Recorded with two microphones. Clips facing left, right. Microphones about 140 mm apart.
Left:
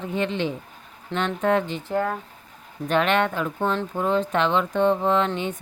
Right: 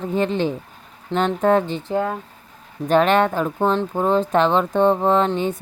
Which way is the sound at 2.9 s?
35° right (ahead or behind).